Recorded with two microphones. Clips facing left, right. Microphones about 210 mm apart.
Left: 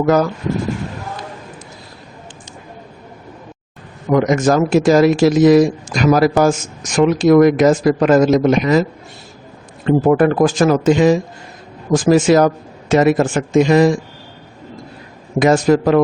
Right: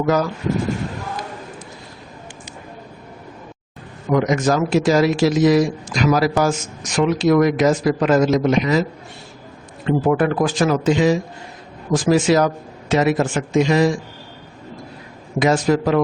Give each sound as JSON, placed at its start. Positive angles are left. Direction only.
{"t": 4.1, "sound": "speech", "side_deg": 50}
{"t": 9.8, "sound": "speech", "side_deg": 45}
{"t": 15.4, "sound": "speech", "side_deg": 50}